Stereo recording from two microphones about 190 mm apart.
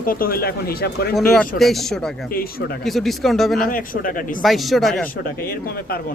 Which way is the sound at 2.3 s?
50° left (ahead or behind).